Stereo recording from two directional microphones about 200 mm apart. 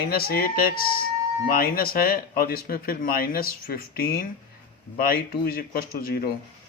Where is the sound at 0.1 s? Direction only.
50° left (ahead or behind).